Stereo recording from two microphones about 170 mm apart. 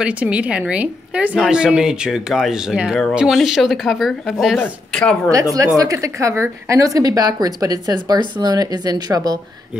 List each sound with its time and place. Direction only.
0.0 s a woman's voice: 10° right (ahead or behind)
5.3 s a woman's voice: 20° right (ahead or behind)